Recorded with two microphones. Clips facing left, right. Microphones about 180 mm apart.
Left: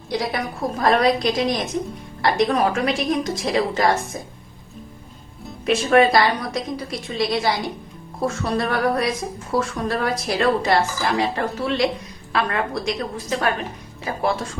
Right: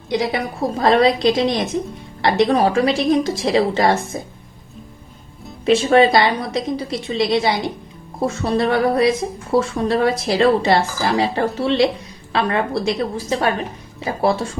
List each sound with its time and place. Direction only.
0.1 s a woman's voice: 20° right (ahead or behind)
5.6 s a woman's voice: 30° right (ahead or behind)